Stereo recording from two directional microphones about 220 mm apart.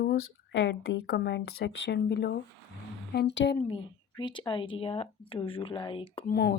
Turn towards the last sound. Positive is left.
turn(degrees=45)  # may be behind; listen again after turning